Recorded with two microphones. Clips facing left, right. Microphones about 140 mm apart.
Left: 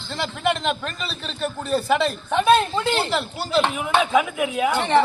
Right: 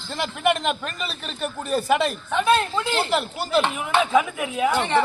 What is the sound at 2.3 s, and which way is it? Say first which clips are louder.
Speech: left 3 dB; 20° left (ahead or behind).